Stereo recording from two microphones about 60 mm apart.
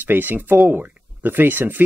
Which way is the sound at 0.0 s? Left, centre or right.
Right.